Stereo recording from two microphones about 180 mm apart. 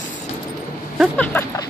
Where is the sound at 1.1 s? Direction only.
10° left (ahead or behind).